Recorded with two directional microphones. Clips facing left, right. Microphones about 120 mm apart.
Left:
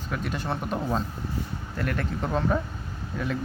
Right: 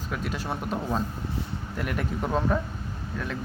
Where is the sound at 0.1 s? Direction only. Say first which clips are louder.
Left 1 dB; 5° right (ahead or behind).